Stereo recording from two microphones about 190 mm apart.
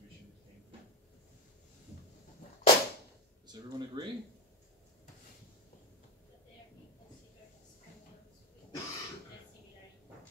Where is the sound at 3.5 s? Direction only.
20° right (ahead or behind).